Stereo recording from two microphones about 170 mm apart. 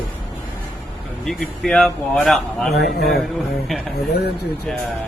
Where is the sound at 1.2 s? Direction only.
5° left (ahead or behind).